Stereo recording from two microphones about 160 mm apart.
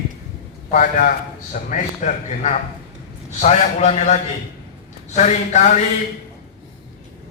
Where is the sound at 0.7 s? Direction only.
60° left (ahead or behind).